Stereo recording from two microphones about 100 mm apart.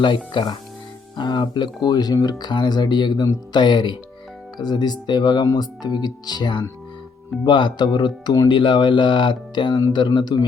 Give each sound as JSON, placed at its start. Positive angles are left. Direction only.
{"t": 0.3, "sound": "speech", "side_deg": 55}